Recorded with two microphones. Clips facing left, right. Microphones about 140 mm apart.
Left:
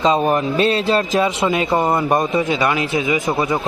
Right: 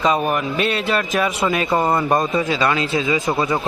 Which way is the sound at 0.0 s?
25° left (ahead or behind).